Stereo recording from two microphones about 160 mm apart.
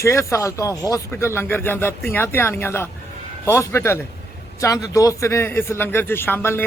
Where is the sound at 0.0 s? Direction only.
20° left (ahead or behind).